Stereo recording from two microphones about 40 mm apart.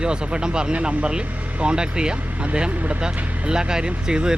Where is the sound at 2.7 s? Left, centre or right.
Right.